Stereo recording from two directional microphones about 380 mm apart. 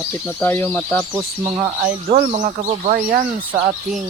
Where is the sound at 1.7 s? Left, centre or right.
Centre.